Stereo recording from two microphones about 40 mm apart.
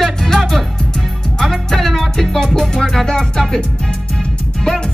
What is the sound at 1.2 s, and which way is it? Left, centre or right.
Music, centre.